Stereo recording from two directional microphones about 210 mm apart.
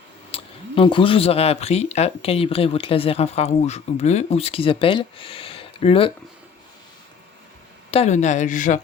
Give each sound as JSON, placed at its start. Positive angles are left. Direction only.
{"t": 0.3, "sound": "speech", "side_deg": 25}
{"t": 7.9, "sound": "speech", "side_deg": 30}